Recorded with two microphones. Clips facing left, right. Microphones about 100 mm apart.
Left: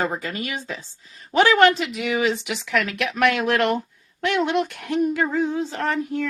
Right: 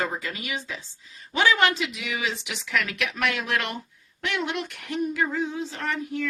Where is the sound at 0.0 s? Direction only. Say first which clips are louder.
Left 4 dB; 45° left (ahead or behind).